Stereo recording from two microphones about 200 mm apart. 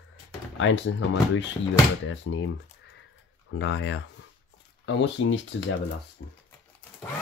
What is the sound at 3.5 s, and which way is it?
Speech, 70° left (ahead or behind).